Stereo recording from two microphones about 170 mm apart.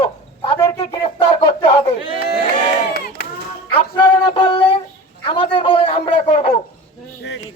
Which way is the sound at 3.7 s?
30° left (ahead or behind).